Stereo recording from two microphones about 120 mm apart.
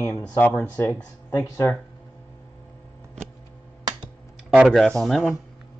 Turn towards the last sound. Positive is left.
turn(degrees=0)  # may be behind; listen again after turning